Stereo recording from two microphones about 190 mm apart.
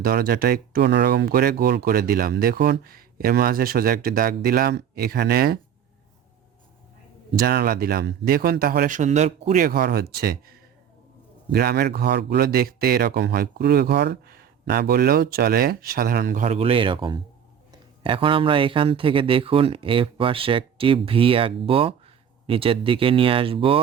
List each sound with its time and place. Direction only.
0.0 s speech: 55° right (ahead or behind)
7.4 s speech: 50° right (ahead or behind); by 23.8 s 30° right (ahead or behind)